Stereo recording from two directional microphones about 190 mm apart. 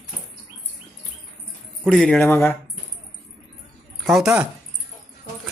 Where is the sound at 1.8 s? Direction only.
5° left (ahead or behind).